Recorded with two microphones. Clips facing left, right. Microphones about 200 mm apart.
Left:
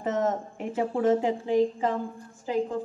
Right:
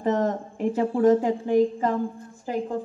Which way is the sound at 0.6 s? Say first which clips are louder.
Right 9 dB; 45° right (ahead or behind).